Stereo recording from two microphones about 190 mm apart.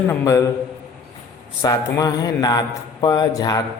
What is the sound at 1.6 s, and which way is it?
A man's voice, 20° left (ahead or behind).